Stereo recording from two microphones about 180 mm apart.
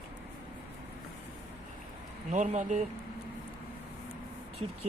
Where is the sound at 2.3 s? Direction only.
40° right (ahead or behind).